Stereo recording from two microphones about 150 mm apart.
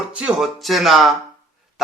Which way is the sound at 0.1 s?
5° right (ahead or behind).